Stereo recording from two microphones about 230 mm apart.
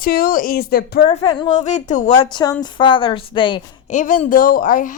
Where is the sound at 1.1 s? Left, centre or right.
Left.